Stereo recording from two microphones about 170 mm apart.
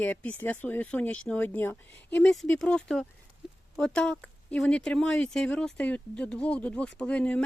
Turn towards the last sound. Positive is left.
turn(degrees=5)  # may be behind; listen again after turning